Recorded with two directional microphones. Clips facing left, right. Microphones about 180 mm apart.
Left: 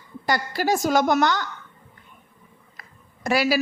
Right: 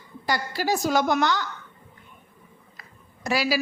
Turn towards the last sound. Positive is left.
turn(degrees=50)  # may be behind; listen again after turning